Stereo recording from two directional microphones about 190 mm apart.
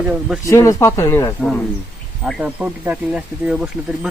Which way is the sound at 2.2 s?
5° right (ahead or behind).